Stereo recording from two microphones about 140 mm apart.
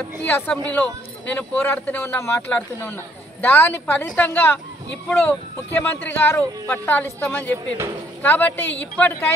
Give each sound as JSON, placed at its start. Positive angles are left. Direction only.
{"t": 0.2, "sound": "speech", "side_deg": 15}